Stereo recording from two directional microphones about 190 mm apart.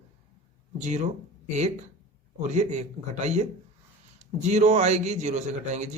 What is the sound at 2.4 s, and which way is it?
A man's voice, 40° right (ahead or behind).